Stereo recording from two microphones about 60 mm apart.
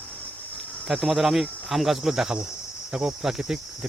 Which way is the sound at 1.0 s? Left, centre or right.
Centre.